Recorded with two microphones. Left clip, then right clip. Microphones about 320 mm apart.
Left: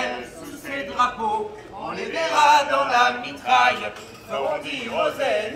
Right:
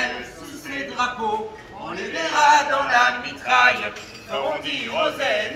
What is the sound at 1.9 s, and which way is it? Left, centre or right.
Chant, centre.